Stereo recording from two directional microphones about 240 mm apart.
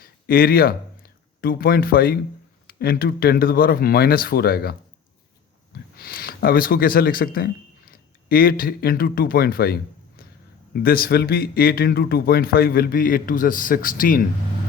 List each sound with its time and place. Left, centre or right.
0.0 s speech: left
6.0 s speech: left
10.8 s speech: left